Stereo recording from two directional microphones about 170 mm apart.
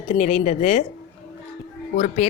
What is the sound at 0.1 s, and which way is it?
Speech, 40° left (ahead or behind).